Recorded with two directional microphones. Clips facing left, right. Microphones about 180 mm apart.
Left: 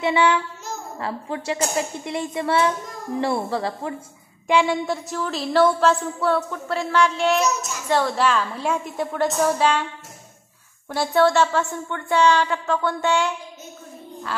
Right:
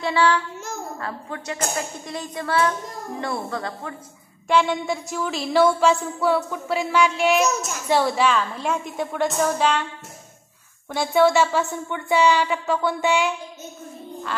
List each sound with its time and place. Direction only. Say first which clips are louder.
0.0 s a woman's voice: left 1 dB; 20° left (ahead or behind)
4.5 s a woman's voice: left 1 dB; 10° left (ahead or behind)
10.9 s speech: even; centre (ahead or behind)